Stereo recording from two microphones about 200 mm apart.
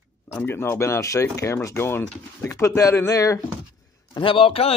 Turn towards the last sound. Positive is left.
turn(degrees=30)  # may be behind; listen again after turning